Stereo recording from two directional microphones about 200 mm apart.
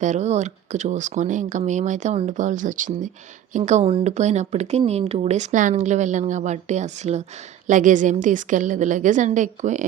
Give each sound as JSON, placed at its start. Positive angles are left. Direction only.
{"t": 0.0, "sound": "speech", "side_deg": -35}